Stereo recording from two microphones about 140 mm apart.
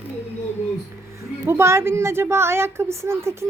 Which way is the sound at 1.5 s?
20° right (ahead or behind).